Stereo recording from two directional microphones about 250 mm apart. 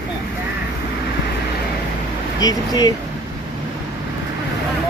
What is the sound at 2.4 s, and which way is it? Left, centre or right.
Speech, centre.